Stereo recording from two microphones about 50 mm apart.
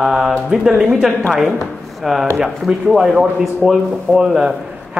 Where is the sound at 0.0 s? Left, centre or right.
Centre.